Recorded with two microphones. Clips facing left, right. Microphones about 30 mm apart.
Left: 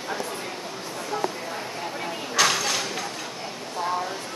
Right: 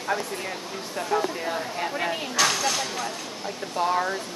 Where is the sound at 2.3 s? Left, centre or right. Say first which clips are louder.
Left 2 dB; centre.